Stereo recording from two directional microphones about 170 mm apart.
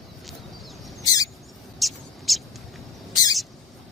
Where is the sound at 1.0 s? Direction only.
20° left (ahead or behind).